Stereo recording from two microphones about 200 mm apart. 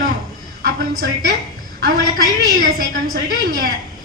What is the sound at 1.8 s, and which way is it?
Speech, 45° right (ahead or behind).